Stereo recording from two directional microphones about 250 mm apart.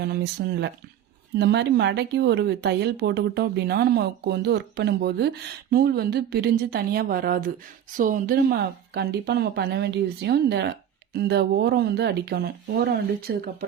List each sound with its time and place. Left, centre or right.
0.0 s speech: right